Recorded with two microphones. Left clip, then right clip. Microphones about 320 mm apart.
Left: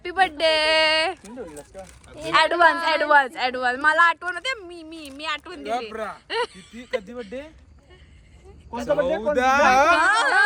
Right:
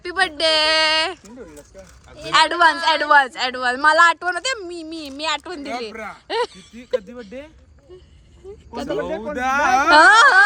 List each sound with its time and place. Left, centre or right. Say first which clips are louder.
0.0 s a sound: right 1 dB; centre
2.3 s speech: right 2 dB; centre
5.9 s speech: left 1 dB; centre
6.2 s speech: right 5 dB; centre
7.0 s speech: left 1 dB; centre
9.0 s speech: left 4 dB; centre
9.9 s speech: right 8 dB; right